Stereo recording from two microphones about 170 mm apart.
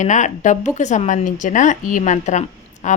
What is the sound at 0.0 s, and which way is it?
A woman's voice, 45° left (ahead or behind).